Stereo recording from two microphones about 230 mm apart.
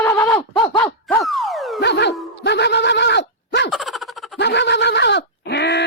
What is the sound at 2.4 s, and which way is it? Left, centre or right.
Neigh, left.